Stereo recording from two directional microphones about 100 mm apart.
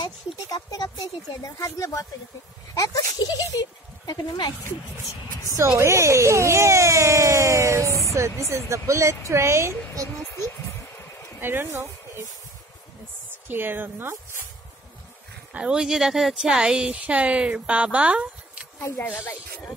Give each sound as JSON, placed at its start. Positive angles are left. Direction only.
{"t": 0.0, "sound": "speech", "side_deg": 45}
{"t": 5.8, "sound": "speech", "side_deg": -25}
{"t": 11.4, "sound": "speech", "side_deg": -25}
{"t": 13.5, "sound": "speech", "side_deg": -20}
{"t": 15.5, "sound": "speech", "side_deg": -10}
{"t": 18.8, "sound": "speech", "side_deg": 25}